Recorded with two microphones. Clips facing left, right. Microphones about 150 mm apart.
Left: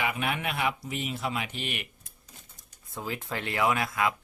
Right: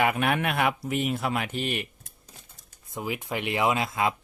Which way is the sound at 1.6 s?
35° right (ahead or behind).